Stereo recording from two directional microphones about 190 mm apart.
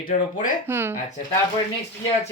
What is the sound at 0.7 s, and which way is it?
Speech, 10° right (ahead or behind).